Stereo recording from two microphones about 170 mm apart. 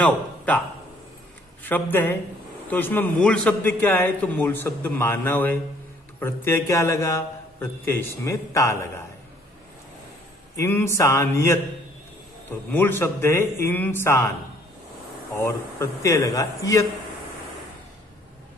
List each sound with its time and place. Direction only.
1.6 s a man's voice: 10° left (ahead or behind)
10.5 s a man's voice: 15° left (ahead or behind)
15.8 s a man's voice: 15° left (ahead or behind)